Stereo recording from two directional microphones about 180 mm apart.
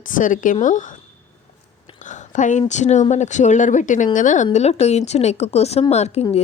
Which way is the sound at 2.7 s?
40° left (ahead or behind).